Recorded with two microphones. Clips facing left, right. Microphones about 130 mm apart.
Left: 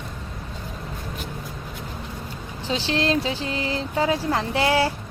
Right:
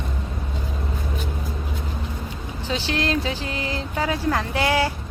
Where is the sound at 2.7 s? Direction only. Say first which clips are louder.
Left 1 dB; 30° left (ahead or behind).